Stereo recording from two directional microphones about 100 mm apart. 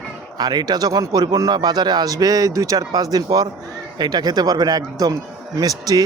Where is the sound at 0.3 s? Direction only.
45° right (ahead or behind).